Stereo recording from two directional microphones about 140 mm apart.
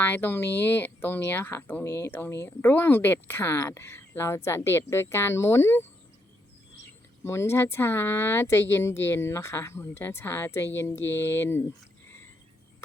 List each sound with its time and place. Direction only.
0.0 s speech: 15° left (ahead or behind)
7.3 s speech: 20° left (ahead or behind)